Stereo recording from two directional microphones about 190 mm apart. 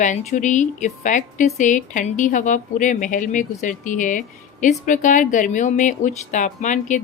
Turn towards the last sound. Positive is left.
turn(degrees=40)  # may be behind; listen again after turning